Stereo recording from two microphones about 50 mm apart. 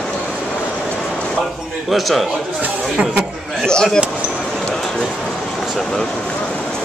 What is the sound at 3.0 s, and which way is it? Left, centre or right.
Speech, centre.